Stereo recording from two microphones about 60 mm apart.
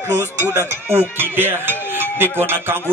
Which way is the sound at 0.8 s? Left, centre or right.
Right.